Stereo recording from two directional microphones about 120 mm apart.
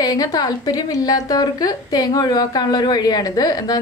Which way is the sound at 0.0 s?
35° left (ahead or behind).